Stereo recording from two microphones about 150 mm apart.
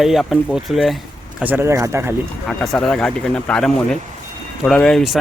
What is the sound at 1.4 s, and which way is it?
Speech, 15° right (ahead or behind).